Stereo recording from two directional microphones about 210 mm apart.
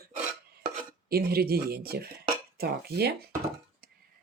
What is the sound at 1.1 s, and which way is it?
Speech, 45° right (ahead or behind).